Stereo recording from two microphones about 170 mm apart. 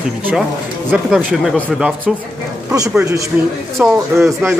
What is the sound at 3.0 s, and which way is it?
A man's voice, 20° right (ahead or behind).